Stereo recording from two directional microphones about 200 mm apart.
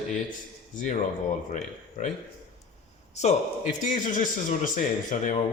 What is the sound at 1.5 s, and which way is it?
Speech, 35° left (ahead or behind).